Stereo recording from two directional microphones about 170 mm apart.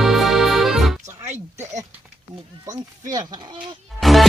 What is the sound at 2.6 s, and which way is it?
Speech, 20° right (ahead or behind).